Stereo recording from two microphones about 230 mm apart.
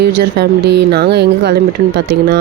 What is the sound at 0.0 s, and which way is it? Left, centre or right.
Speech, right.